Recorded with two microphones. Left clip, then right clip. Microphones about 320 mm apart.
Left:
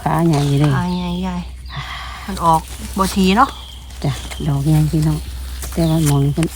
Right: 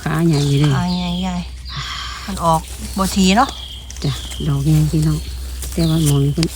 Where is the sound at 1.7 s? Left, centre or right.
Centre.